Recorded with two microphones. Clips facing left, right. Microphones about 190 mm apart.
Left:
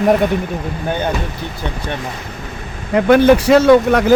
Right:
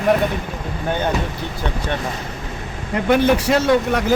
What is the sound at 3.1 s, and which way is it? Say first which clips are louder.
Speech: left 6 dB; 90° left.